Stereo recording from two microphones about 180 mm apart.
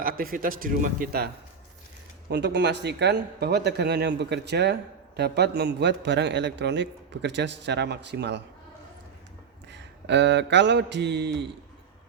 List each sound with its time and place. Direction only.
0.0 s a man's voice: 55° right (ahead or behind)
2.3 s speech: 70° right (ahead or behind)
9.7 s mantra: 75° right (ahead or behind)